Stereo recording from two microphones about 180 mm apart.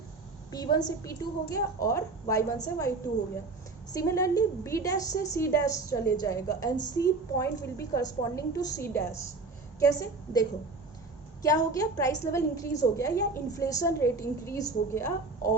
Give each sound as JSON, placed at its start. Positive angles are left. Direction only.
{"t": 0.5, "sound": "a woman's voice", "side_deg": 20}
{"t": 3.9, "sound": "a woman's voice", "side_deg": 15}
{"t": 11.4, "sound": "a woman's voice", "side_deg": 20}